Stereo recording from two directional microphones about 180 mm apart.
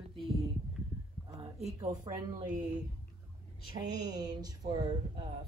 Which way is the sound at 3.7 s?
20° right (ahead or behind).